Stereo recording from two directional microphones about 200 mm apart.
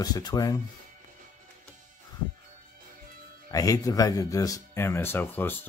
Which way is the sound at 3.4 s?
15° left (ahead or behind).